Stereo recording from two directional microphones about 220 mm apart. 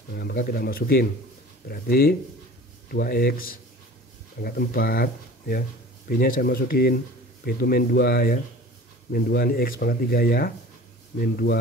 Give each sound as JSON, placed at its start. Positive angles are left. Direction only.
{"t": 0.1, "sound": "speech", "side_deg": 45}